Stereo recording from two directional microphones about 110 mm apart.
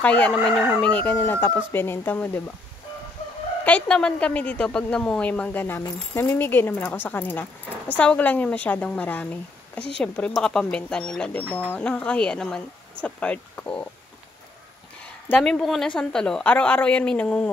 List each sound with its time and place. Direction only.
0.0 s a woman's voice: 10° left (ahead or behind)
0.9 s speech: 20° left (ahead or behind)
3.6 s a woman's voice: 10° left (ahead or behind)
15.2 s a woman's voice: 10° left (ahead or behind)